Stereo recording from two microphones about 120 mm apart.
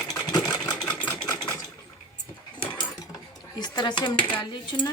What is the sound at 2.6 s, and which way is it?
Mechanisms, 45° left (ahead or behind).